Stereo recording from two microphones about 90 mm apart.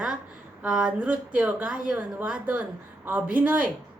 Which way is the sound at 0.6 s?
5° right (ahead or behind).